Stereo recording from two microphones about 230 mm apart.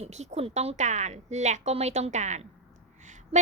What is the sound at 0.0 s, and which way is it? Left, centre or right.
A woman's voice, right.